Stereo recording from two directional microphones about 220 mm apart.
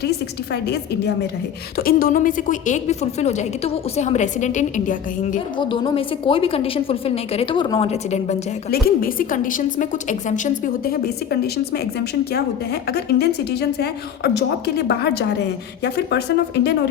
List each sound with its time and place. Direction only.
0.5 s a woman's voice: 50° left (ahead or behind)
5.5 s a woman's voice: 20° left (ahead or behind)
8.7 s a woman's voice: 40° left (ahead or behind)